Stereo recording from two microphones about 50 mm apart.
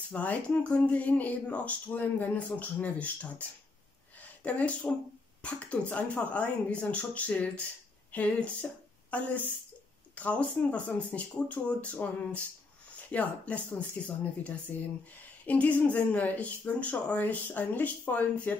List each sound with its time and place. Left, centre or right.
0.1 s speech: left
4.2 s a sound: left
5.4 s speech: left